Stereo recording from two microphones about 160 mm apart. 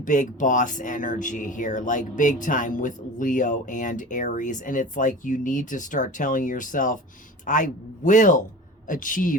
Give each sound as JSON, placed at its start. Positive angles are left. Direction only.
{"t": 0.0, "sound": "a woman's voice", "side_deg": 55}